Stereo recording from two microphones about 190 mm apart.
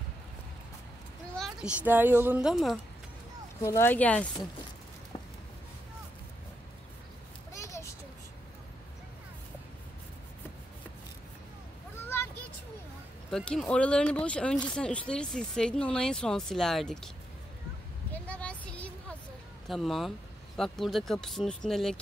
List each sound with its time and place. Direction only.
1.3 s a child's voice: centre (ahead or behind)
3.6 s speech: 10° left (ahead or behind)
7.5 s a sound: 15° left (ahead or behind)
13.3 s speech: 5° left (ahead or behind)
18.1 s a sound: 5° left (ahead or behind)
19.7 s speech: centre (ahead or behind)